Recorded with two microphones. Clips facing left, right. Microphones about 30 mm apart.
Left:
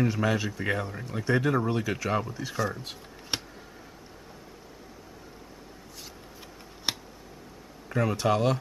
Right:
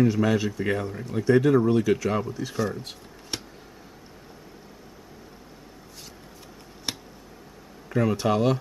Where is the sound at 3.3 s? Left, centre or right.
Left.